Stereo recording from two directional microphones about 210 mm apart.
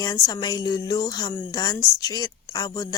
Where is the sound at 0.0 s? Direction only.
20° left (ahead or behind).